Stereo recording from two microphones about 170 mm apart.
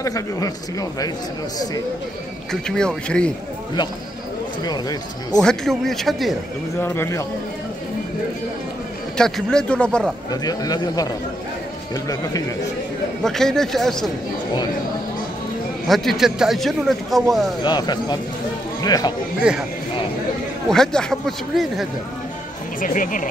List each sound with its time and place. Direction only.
0.0 s speech: 20° left (ahead or behind)
2.5 s a man's voice: 5° left (ahead or behind)
4.6 s speech: 20° left (ahead or behind)
5.4 s a man's voice: centre (ahead or behind)
6.8 s a man's voice: 15° left (ahead or behind)
9.1 s a man's voice: 5° left (ahead or behind)
10.3 s speech: 25° left (ahead or behind)
13.2 s a man's voice: 5° left (ahead or behind)
15.9 s a man's voice: centre (ahead or behind)
17.6 s speech: 25° left (ahead or behind)
19.5 s a man's voice: 5° right (ahead or behind)
20.6 s a man's voice: 5° left (ahead or behind)
22.8 s speech: 50° left (ahead or behind)